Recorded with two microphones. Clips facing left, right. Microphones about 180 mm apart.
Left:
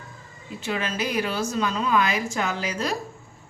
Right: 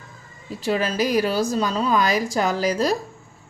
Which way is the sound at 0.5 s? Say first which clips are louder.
Right 6 dB; 35° right (ahead or behind).